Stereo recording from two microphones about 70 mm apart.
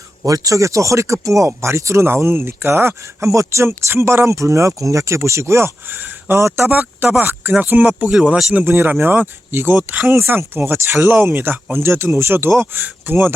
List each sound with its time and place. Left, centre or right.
0.3 s speech: right
6.3 s speech: right
6.7 s speech: right
8.5 s speech: right
10.1 s speech: right